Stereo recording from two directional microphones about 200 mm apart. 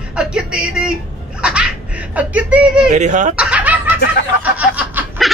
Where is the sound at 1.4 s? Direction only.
5° right (ahead or behind).